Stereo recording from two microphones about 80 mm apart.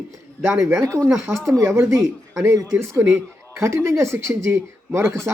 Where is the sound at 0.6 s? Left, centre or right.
Right.